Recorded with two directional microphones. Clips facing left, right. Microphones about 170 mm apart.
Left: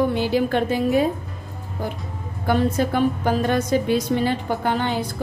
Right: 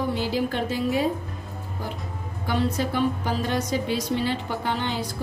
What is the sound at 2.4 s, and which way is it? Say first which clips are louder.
A woman's voice: left 5 dB; 50° left (ahead or behind).